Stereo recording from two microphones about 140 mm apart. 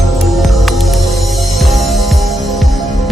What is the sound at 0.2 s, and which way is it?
Music, centre (ahead or behind).